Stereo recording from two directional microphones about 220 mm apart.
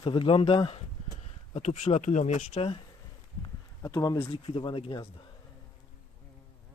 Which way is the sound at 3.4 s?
15° left (ahead or behind).